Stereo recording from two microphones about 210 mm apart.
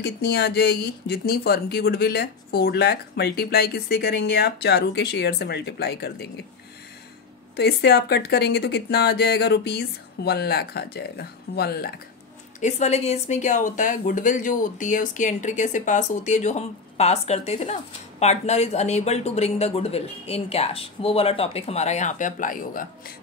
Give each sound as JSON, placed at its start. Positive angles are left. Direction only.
{"t": 0.0, "sound": "speech", "side_deg": 50}
{"t": 7.5, "sound": "speech", "side_deg": 50}
{"t": 12.5, "sound": "speech", "side_deg": 35}